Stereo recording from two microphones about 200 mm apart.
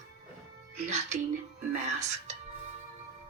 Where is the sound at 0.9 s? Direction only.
35° right (ahead or behind).